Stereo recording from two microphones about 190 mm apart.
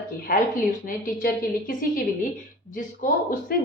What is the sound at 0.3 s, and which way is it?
A woman's voice, 50° left (ahead or behind).